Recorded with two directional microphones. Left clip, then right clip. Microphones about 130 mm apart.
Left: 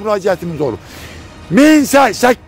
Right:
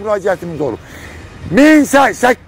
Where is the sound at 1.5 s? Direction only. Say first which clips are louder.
Right 1 dB; 90° left.